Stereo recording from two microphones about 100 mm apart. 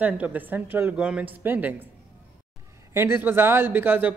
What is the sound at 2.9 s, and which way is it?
Speech, 20° right (ahead or behind).